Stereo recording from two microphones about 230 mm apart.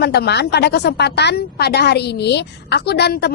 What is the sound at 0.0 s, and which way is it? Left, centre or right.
A woman's voice, left.